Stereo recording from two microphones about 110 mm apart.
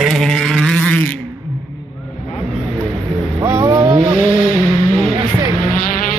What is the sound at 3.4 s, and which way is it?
Vehicle, 30° right (ahead or behind).